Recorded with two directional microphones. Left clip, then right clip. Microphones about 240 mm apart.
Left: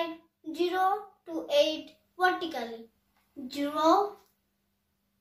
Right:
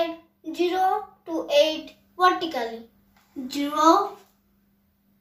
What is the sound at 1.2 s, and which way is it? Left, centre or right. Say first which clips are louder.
A child's voice: right 6 dB; centre.